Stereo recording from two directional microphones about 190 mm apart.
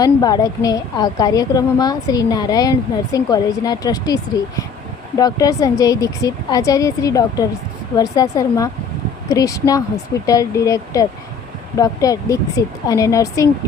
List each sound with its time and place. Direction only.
0.0 s a woman's voice: 20° left (ahead or behind)